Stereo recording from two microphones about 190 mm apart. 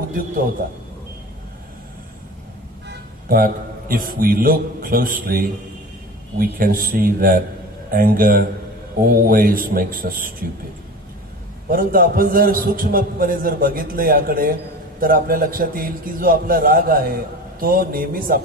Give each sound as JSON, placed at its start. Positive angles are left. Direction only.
{"t": 2.9, "sound": "a man's voice", "side_deg": -50}
{"t": 11.7, "sound": "a man's voice", "side_deg": -50}